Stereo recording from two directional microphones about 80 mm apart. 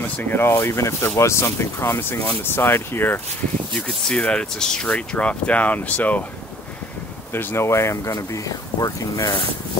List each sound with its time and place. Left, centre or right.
0.2 s speech: left
3.8 s speech: centre
7.3 s speech: left